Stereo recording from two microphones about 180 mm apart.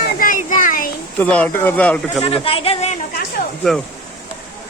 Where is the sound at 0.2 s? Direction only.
50° left (ahead or behind).